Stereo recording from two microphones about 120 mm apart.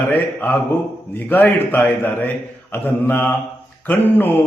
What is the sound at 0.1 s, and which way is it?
Speech, 15° left (ahead or behind).